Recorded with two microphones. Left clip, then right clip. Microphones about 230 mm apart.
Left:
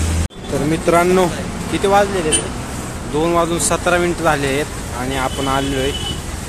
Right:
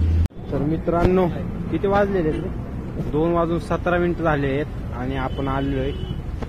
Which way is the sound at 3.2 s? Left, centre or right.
Centre.